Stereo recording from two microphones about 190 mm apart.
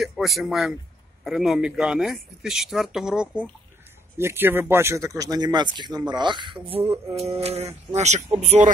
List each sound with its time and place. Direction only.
0.0 s speech: centre (ahead or behind); by 8.7 s 40° right (ahead or behind)